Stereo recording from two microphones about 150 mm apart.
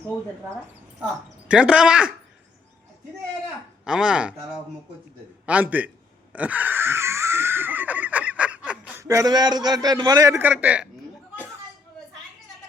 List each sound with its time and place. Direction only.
1.5 s speech: 5° right (ahead or behind)
3.8 s speech: 5° right (ahead or behind)
5.5 s a man's voice: 10° right (ahead or behind)
6.3 s wheeze: 10° right (ahead or behind)
9.0 s a man's voice: 20° right (ahead or behind)
10.3 s a man's voice: 10° right (ahead or behind)